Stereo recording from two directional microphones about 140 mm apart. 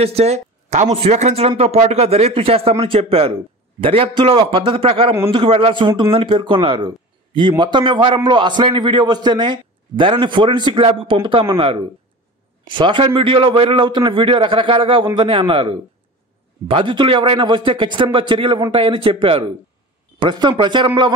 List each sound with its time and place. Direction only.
0.0 s a man's voice: 45° right (ahead or behind)